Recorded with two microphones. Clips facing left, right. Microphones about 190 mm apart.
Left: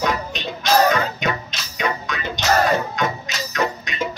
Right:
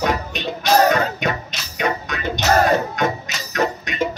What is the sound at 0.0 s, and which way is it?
Music, 50° right (ahead or behind).